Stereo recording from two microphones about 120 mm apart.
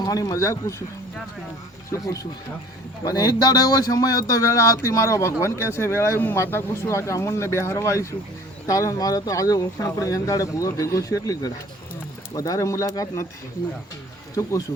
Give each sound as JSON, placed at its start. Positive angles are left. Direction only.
{"t": 0.0, "sound": "speech", "side_deg": 30}
{"t": 1.9, "sound": "speech", "side_deg": 25}